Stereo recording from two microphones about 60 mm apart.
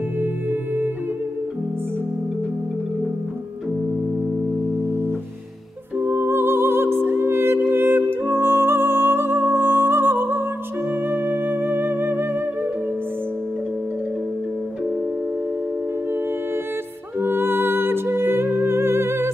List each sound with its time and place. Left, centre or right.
0.2 s music: right
5.9 s music: right
17.2 s music: right